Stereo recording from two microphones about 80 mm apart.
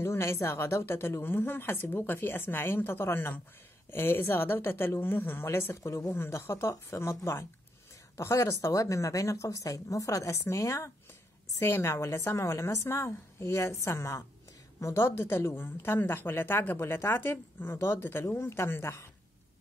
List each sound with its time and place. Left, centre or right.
0.0 s a woman's voice: left